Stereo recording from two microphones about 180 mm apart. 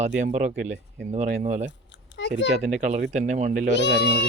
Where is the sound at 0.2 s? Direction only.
45° right (ahead or behind).